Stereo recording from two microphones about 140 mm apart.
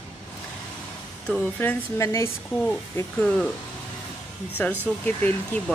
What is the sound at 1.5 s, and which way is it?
Speech, 15° left (ahead or behind).